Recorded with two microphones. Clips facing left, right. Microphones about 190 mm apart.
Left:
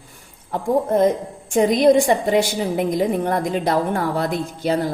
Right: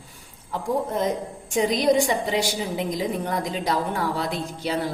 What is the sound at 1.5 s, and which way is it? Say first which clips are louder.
A woman's voice: left 6 dB; 55° left (ahead or behind).